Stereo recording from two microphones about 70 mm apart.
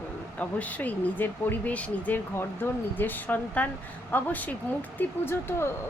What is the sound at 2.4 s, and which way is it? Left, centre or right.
A woman's voice, left.